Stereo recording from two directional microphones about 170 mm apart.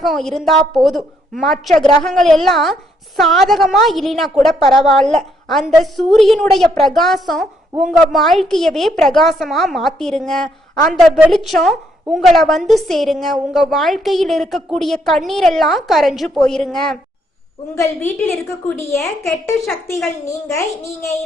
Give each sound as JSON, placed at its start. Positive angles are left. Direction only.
{"t": 0.0, "sound": "a woman's voice", "side_deg": 0}
{"t": 19.6, "sound": "a woman's voice", "side_deg": 0}
{"t": 20.5, "sound": "a woman's voice", "side_deg": 15}